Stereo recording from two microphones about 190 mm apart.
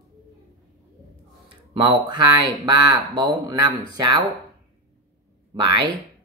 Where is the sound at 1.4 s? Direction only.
25° right (ahead or behind).